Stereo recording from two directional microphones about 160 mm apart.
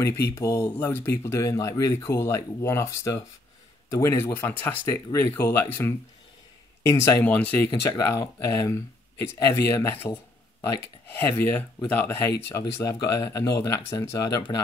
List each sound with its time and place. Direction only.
0.3 s speech: 20° left (ahead or behind)